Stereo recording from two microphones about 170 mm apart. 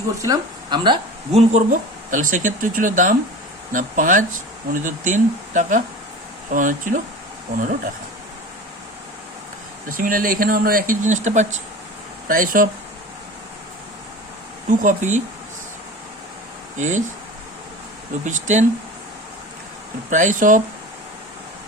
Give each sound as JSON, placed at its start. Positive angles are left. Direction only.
{"t": 0.2, "sound": "speech", "side_deg": -25}
{"t": 1.3, "sound": "speech", "side_deg": -40}
{"t": 9.9, "sound": "speech", "side_deg": -55}
{"t": 12.3, "sound": "speech", "side_deg": -55}
{"t": 14.7, "sound": "speech", "side_deg": -50}
{"t": 16.7, "sound": "speech", "side_deg": -45}
{"t": 18.3, "sound": "speech", "side_deg": -45}
{"t": 20.1, "sound": "speech", "side_deg": -45}